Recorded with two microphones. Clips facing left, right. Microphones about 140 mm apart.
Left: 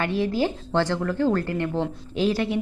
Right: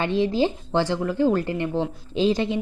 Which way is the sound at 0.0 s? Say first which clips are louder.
Right 2 dB; 20° right (ahead or behind).